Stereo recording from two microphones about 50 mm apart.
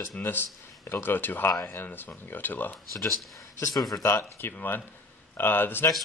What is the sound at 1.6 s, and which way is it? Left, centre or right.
Speech, left.